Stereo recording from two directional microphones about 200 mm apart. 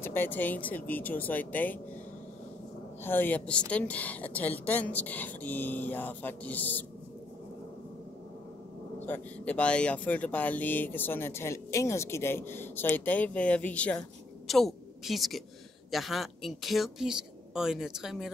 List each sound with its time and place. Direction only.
0.0 s speech: 10° left (ahead or behind)
3.0 s speech: 10° left (ahead or behind)
9.0 s a woman's voice: 10° left (ahead or behind)